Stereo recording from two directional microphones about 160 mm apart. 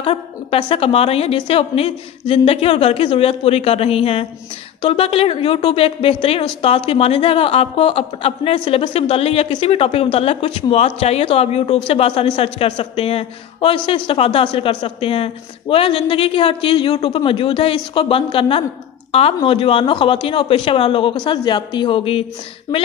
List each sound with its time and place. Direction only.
0.0 s a woman's voice: 35° left (ahead or behind)